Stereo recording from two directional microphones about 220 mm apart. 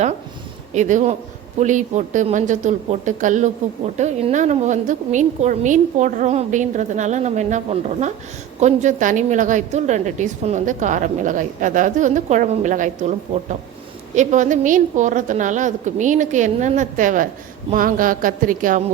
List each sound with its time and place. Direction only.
0.7 s a woman's voice: 35° right (ahead or behind)